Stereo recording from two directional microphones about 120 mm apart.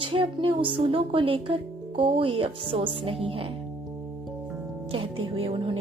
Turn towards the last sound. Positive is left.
turn(degrees=-50)  # may be behind; listen again after turning